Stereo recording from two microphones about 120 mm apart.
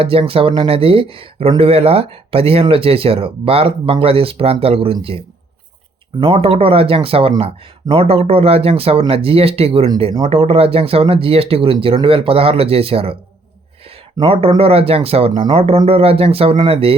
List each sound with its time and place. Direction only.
0.0 s speech: 50° right (ahead or behind)
6.1 s speech: 50° right (ahead or behind)
14.6 s speech: 55° right (ahead or behind)
15.3 s speech: 35° right (ahead or behind)
15.5 s speech: 55° right (ahead or behind)